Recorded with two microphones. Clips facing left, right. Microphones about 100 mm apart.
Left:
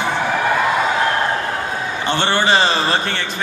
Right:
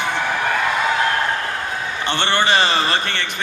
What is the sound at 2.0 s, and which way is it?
Speech, 15° left (ahead or behind).